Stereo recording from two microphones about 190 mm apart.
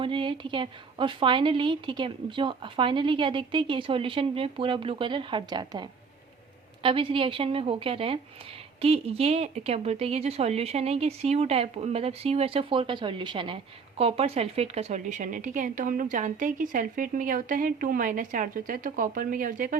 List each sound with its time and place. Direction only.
0.0 s a woman's voice: 25° right (ahead or behind); by 19.7 s 45° right (ahead or behind)